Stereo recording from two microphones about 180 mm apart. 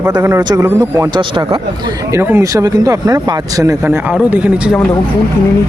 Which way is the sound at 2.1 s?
15° right (ahead or behind).